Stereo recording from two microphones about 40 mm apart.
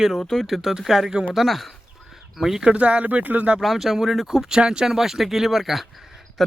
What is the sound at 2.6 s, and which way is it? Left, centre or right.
Speech, right.